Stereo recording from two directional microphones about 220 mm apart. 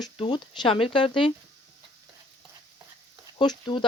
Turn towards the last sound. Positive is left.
turn(degrees=20)  # may be behind; listen again after turning